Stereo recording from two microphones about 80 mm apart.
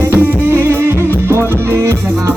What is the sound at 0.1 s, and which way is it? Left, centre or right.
Music, right.